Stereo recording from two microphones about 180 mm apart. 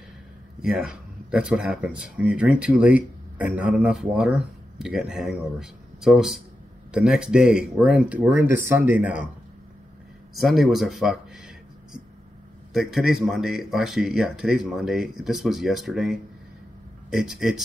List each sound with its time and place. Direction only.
0.6 s speech: 5° right (ahead or behind)
10.3 s speech: centre (ahead or behind)